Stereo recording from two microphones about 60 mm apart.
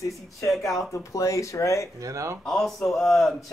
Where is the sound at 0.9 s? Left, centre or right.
Left.